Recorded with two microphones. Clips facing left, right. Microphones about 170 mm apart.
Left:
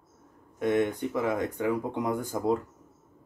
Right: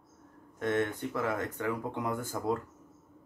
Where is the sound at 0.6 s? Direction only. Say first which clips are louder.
Left 5 dB; 15° left (ahead or behind).